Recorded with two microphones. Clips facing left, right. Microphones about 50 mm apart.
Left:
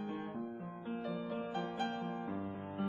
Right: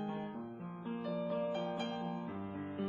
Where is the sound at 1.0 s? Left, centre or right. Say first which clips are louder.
Right 4 dB; centre.